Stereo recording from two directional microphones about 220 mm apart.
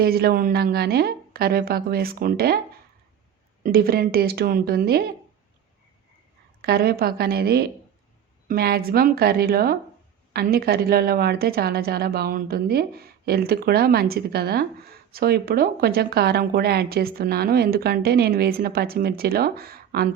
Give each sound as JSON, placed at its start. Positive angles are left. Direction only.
{"t": 0.0, "sound": "a woman's voice", "side_deg": -45}
{"t": 3.6, "sound": "a woman's voice", "side_deg": -40}
{"t": 6.6, "sound": "a woman's voice", "side_deg": -45}